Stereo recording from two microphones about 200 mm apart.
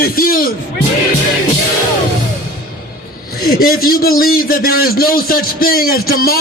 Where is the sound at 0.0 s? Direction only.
45° left (ahead or behind).